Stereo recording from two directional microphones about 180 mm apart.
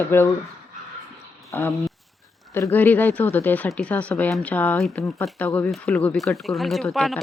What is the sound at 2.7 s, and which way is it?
Speech, 10° left (ahead or behind).